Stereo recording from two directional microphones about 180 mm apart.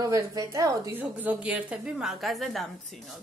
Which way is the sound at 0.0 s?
20° right (ahead or behind).